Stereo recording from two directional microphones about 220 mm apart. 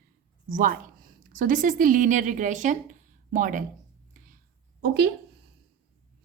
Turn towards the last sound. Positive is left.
turn(degrees=-50)  # may be behind; listen again after turning